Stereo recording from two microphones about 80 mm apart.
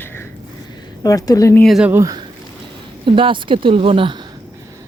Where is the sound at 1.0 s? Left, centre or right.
Left.